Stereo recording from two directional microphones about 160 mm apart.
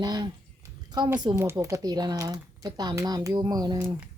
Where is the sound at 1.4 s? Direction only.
15° right (ahead or behind).